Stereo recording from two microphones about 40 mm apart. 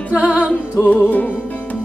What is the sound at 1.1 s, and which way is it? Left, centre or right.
Music, left.